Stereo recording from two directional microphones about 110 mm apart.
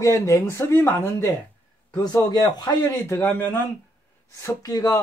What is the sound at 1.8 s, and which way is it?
Speech, 40° left (ahead or behind).